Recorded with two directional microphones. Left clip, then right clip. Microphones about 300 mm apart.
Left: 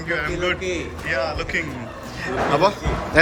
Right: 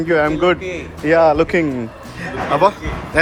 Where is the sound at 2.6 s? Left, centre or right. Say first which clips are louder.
Right 4 dB; centre.